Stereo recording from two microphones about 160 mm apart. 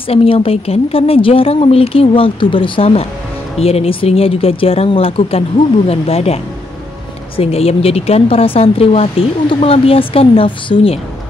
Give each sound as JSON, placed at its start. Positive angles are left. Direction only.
{"t": 0.1, "sound": "speech", "side_deg": 35}